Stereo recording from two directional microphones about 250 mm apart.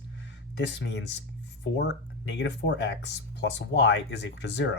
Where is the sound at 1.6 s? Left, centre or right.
Left.